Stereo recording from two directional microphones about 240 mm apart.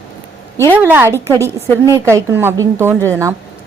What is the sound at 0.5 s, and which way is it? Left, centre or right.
Speech, centre.